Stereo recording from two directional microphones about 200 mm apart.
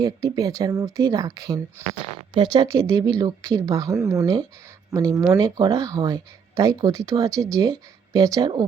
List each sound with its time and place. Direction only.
0.0 s speech: 20° right (ahead or behind)